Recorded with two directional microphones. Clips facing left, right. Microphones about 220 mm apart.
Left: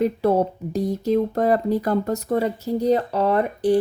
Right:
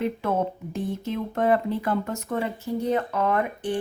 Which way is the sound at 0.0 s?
35° left (ahead or behind).